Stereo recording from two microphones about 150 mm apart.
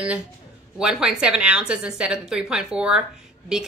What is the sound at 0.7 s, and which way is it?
A woman's voice, 5° right (ahead or behind).